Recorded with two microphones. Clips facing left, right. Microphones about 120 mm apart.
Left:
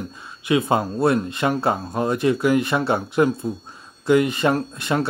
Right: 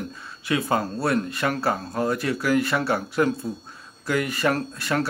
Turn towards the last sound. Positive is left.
turn(degrees=20)  # may be behind; listen again after turning